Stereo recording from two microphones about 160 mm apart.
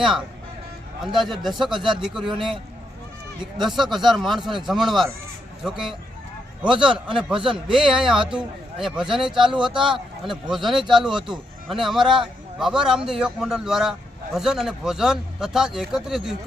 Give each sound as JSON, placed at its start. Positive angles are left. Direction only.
{"t": 0.0, "sound": "a man's voice", "side_deg": -5}
{"t": 9.2, "sound": "speech", "side_deg": -30}
{"t": 10.2, "sound": "a man's voice", "side_deg": 0}